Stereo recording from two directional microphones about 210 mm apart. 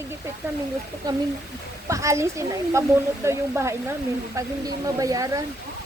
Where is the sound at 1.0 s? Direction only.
15° right (ahead or behind).